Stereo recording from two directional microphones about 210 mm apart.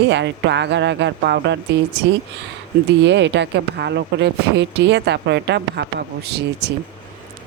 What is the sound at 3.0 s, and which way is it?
Speech, 55° right (ahead or behind).